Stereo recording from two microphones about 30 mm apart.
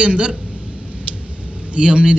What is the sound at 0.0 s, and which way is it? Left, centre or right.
Speech, right.